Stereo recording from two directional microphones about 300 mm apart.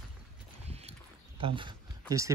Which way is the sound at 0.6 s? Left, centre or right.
Right.